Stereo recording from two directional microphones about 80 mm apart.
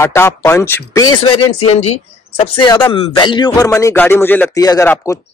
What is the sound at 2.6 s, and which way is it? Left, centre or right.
Speech, left.